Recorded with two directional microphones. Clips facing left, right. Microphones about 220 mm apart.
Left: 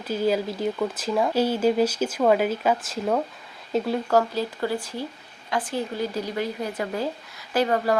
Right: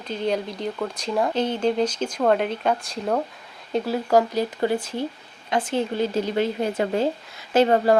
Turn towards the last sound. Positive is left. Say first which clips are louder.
# right 5 dB
turn(degrees=-25)  # may be behind; listen again after turning